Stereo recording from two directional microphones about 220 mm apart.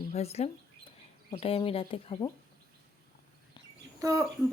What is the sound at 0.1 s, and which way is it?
Speech, 30° left (ahead or behind).